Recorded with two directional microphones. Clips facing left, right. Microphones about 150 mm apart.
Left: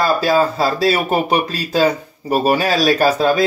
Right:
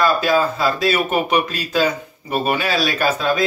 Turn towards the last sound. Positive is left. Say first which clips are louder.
# left 4 dB
turn(degrees=40)  # may be behind; listen again after turning